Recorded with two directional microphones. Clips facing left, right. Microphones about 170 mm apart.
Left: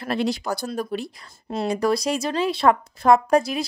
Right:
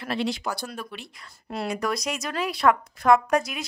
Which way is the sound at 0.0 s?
40° left (ahead or behind).